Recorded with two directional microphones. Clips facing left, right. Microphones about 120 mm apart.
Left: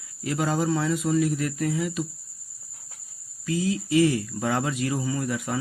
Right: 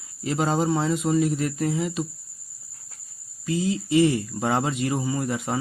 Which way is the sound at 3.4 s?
25° right (ahead or behind).